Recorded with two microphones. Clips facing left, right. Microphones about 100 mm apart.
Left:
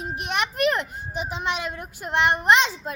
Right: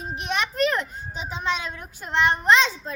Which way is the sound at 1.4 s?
15° left (ahead or behind).